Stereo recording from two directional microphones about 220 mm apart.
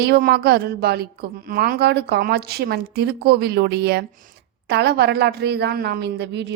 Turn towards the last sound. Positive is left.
turn(degrees=-50)  # may be behind; listen again after turning